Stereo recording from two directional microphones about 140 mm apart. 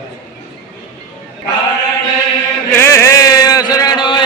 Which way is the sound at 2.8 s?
20° left (ahead or behind).